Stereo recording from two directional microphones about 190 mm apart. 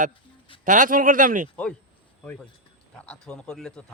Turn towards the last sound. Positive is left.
turn(degrees=5)  # may be behind; listen again after turning